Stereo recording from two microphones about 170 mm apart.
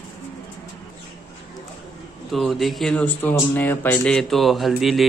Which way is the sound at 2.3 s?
Centre (ahead or behind).